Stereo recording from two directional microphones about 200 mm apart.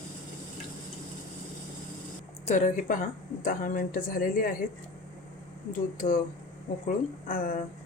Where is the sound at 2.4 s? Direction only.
35° left (ahead or behind).